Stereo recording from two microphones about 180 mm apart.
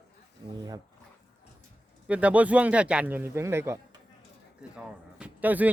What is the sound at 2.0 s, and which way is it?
Speech, 5° right (ahead or behind).